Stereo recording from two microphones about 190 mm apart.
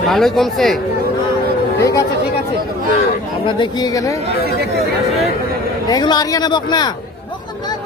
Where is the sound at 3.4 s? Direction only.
20° left (ahead or behind).